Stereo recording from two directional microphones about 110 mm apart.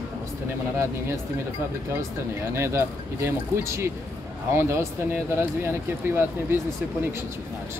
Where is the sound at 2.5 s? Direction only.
25° right (ahead or behind).